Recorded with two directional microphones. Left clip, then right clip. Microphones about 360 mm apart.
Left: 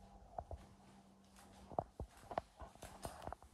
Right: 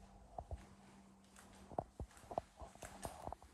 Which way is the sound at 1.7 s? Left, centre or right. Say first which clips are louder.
Left 2 dB; centre.